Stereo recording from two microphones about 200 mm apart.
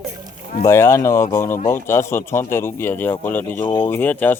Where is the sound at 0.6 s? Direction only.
15° left (ahead or behind).